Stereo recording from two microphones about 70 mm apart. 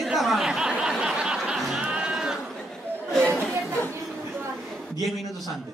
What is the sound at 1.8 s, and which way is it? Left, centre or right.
Sheep, centre.